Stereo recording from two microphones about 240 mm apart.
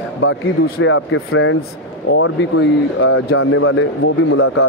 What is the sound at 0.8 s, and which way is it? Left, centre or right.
Speech, left.